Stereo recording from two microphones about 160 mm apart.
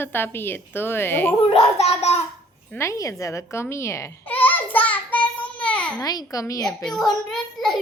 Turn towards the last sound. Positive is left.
turn(degrees=0)  # may be behind; listen again after turning